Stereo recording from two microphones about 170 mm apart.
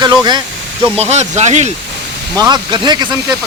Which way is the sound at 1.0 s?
40° right (ahead or behind).